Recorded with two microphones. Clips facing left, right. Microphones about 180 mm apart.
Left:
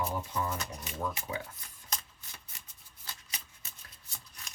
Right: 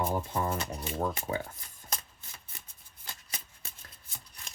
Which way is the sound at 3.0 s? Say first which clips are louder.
Right 2 dB; 50° right (ahead or behind).